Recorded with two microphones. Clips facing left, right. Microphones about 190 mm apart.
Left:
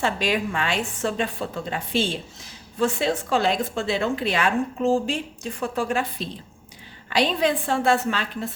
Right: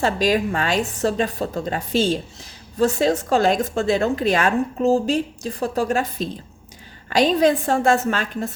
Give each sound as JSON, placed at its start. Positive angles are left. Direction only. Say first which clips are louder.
{"t": 0.0, "sound": "a woman's voice", "louder": "right 5 dB", "side_deg": -40}